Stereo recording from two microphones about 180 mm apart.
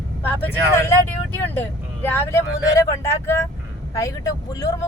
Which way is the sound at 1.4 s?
10° left (ahead or behind).